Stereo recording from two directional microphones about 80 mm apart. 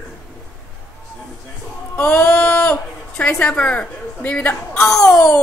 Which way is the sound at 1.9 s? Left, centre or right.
Left.